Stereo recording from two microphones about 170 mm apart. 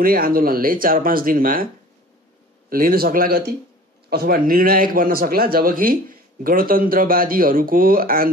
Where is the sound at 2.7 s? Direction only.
60° right (ahead or behind).